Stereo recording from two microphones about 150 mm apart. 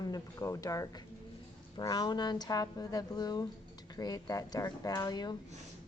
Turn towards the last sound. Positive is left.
turn(degrees=25)  # may be behind; listen again after turning